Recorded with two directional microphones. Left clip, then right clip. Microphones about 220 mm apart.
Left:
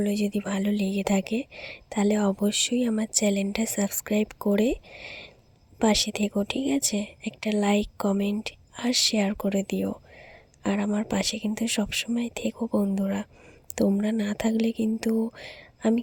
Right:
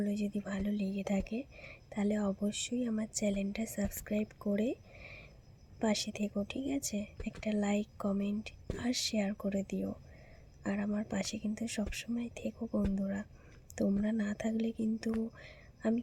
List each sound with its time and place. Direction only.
0.0 s speech: 40° left (ahead or behind)